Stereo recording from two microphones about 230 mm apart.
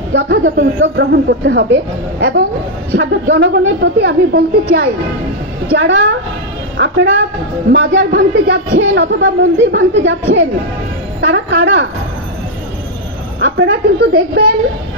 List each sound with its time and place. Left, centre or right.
0.1 s speech: right
11.1 s speech: right
13.4 s speech: right